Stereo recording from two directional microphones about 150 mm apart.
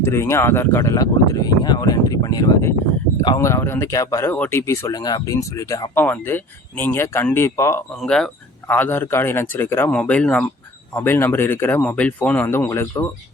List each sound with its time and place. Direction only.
0.0 s a man's voice: 15° left (ahead or behind)
8.0 s a man's voice: 5° left (ahead or behind)